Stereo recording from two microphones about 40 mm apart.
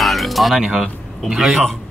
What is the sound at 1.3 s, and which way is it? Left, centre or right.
Speech, centre.